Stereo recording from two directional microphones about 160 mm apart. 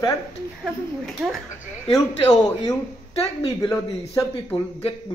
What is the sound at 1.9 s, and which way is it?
A man's voice, 25° left (ahead or behind).